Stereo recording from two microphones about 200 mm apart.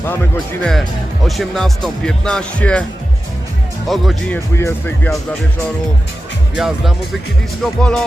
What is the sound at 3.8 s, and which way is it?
Speech, centre (ahead or behind).